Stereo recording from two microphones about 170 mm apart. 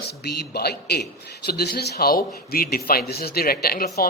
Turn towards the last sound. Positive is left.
turn(degrees=65)  # may be behind; listen again after turning